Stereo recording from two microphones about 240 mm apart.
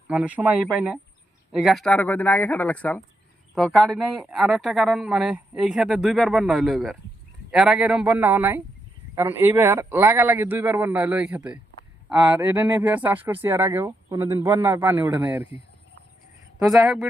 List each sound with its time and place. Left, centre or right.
0.1 s speech: centre
16.6 s speech: centre